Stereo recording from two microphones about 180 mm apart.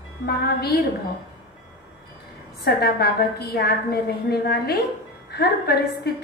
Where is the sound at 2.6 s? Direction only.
60° left (ahead or behind).